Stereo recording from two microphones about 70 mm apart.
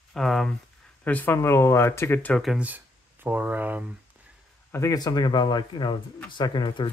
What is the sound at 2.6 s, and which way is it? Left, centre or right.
Speech, right.